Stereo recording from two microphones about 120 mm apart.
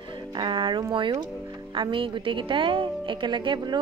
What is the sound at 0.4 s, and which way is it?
A woman's voice, 40° right (ahead or behind).